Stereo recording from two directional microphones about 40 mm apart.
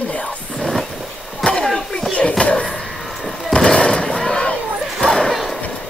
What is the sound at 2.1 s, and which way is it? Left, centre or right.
Speech, left.